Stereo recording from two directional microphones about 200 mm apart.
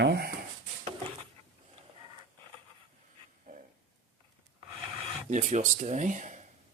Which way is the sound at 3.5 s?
45° right (ahead or behind).